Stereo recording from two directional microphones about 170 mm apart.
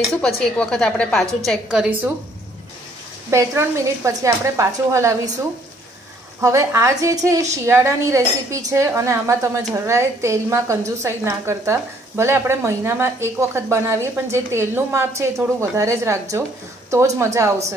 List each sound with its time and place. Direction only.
0.1 s speech: 5° left (ahead or behind)
3.3 s a woman's voice: 15° right (ahead or behind)
6.4 s a woman's voice: 20° right (ahead or behind)